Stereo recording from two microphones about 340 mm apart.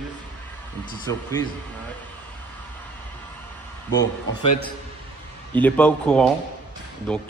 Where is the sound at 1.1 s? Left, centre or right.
Centre.